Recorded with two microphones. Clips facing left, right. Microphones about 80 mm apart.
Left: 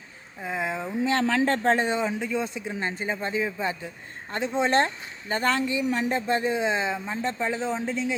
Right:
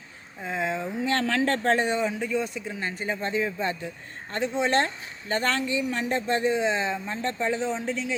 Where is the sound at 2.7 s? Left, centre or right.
Left.